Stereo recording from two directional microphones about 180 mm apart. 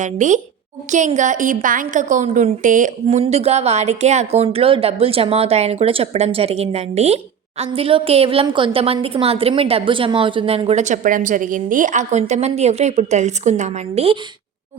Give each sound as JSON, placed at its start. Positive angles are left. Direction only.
{"t": 0.0, "sound": "a woman's voice", "side_deg": -45}